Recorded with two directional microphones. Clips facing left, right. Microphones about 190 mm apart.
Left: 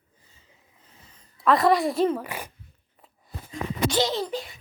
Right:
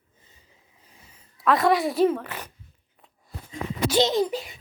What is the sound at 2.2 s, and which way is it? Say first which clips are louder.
Speech: left 2 dB; 10° left (ahead or behind).